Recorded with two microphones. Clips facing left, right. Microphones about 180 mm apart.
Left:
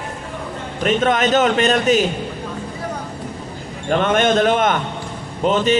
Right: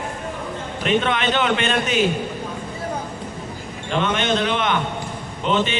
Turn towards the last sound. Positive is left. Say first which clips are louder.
# left 5 dB
turn(degrees=40)  # may be behind; listen again after turning